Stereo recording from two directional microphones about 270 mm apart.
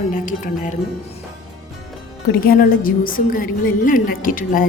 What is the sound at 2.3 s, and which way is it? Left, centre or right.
A woman's voice, left.